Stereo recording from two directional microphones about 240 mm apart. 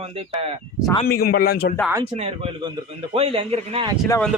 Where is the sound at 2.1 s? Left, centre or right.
Right.